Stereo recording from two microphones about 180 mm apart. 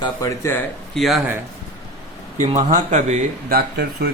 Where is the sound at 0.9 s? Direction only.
Centre (ahead or behind).